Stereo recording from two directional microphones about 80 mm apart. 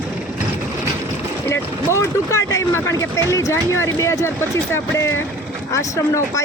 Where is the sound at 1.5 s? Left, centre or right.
Left.